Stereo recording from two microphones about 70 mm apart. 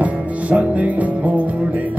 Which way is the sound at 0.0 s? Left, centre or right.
Centre.